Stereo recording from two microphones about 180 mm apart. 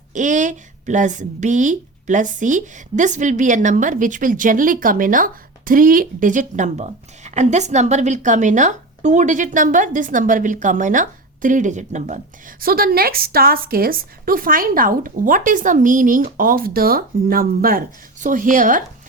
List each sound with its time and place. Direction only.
0.1 s speech: 45° right (ahead or behind)